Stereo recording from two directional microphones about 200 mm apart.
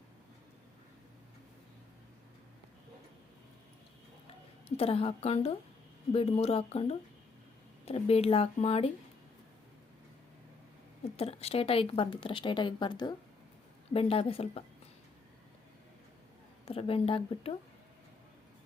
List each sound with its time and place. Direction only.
4.8 s speech: 30° left (ahead or behind)
11.2 s speech: 30° left (ahead or behind)
16.6 s speech: 30° left (ahead or behind)